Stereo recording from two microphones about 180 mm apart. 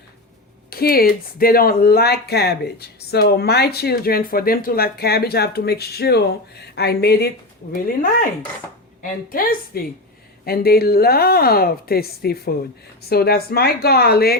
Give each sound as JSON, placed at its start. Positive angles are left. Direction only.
{"t": 0.7, "sound": "speech", "side_deg": 55}
{"t": 9.0, "sound": "a woman's voice", "side_deg": 50}